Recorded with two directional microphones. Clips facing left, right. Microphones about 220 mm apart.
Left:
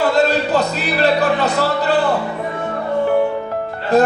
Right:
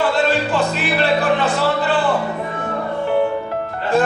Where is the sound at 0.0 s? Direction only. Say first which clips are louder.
Left 2 dB; 40° left (ahead or behind).